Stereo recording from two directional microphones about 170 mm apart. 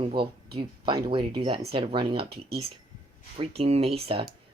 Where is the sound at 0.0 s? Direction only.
30° right (ahead or behind).